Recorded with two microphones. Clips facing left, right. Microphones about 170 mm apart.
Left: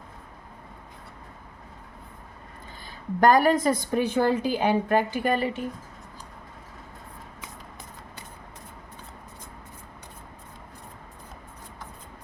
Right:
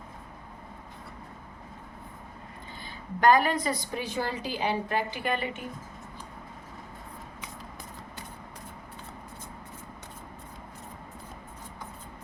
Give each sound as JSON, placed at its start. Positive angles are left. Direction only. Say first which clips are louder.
{"t": 2.8, "sound": "a woman's voice", "louder": "left 3 dB", "side_deg": 45}